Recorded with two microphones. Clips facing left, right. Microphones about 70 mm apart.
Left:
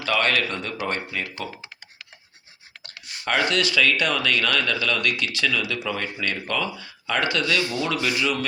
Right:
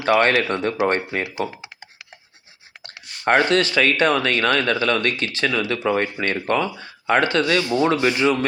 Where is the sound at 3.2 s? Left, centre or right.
Right.